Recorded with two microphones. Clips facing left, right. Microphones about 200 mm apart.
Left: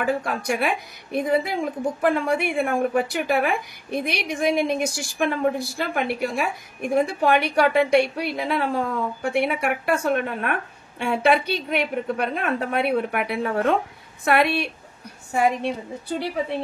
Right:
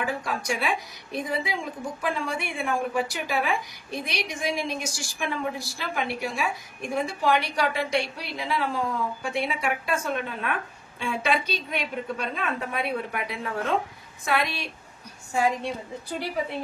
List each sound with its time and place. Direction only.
0.0 s a woman's voice: 60° left (ahead or behind)